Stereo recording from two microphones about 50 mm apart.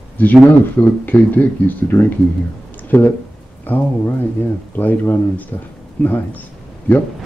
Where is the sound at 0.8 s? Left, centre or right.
Left.